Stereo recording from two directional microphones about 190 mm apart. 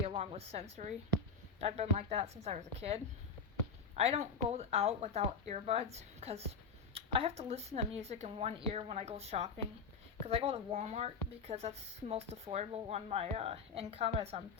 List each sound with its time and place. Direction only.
0.0 s a woman's voice: 30° right (ahead or behind)
1.6 s a woman's voice: 35° right (ahead or behind)
4.0 s a woman's voice: 35° right (ahead or behind)